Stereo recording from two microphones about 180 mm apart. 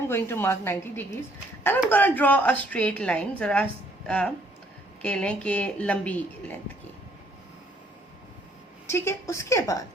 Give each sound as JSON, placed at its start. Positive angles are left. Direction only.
{"t": 0.1, "sound": "a woman's voice", "side_deg": 15}
{"t": 8.9, "sound": "a woman's voice", "side_deg": 15}